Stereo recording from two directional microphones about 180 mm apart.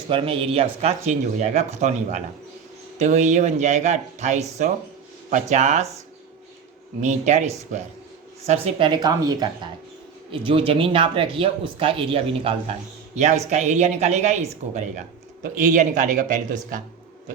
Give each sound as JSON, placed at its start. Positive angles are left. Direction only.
{"t": 0.1, "sound": "speech", "side_deg": -30}
{"t": 7.0, "sound": "a man's voice", "side_deg": -40}